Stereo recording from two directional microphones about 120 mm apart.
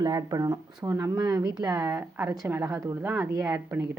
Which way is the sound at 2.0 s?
15° right (ahead or behind).